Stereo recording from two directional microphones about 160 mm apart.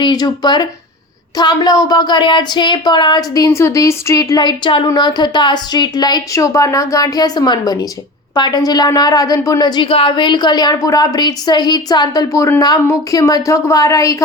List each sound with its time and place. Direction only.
0.0 s a woman's voice: 25° left (ahead or behind)